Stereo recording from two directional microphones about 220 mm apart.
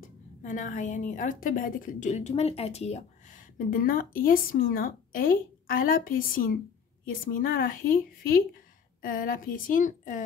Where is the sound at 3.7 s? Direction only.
40° left (ahead or behind).